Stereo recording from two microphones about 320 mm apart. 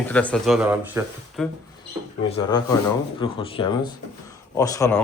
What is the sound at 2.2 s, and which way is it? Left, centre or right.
Speech, centre.